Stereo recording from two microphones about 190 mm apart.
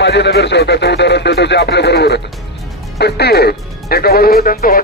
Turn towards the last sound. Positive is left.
turn(degrees=50)  # may be behind; listen again after turning